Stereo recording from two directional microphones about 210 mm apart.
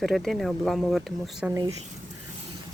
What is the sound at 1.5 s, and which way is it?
Speech, 15° right (ahead or behind).